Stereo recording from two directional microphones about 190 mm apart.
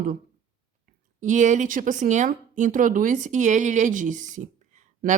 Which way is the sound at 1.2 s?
40° right (ahead or behind).